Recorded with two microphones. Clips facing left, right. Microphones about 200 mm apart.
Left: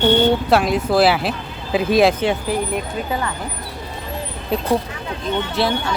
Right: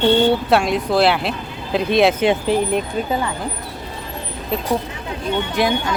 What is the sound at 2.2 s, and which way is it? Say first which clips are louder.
Speech: right 3 dB; 20° right (ahead or behind).